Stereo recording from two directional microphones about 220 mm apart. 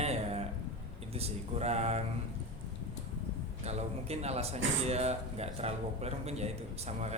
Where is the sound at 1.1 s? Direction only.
30° right (ahead or behind).